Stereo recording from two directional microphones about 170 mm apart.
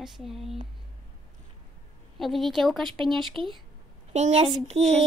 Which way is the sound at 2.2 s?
Centre (ahead or behind).